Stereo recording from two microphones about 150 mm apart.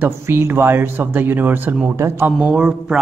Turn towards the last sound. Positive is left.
turn(degrees=-5)  # may be behind; listen again after turning